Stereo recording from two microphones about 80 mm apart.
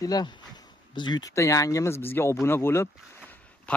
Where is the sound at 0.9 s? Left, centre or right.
Left.